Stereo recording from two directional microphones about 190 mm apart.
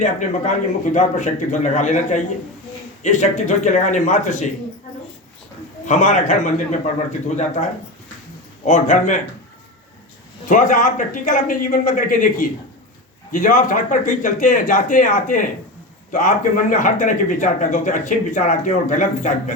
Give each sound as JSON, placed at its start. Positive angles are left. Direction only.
{"t": 0.0, "sound": "a man's voice", "side_deg": 40}
{"t": 5.8, "sound": "a man's voice", "side_deg": 40}
{"t": 8.6, "sound": "a man's voice", "side_deg": 40}
{"t": 10.5, "sound": "a man's voice", "side_deg": 45}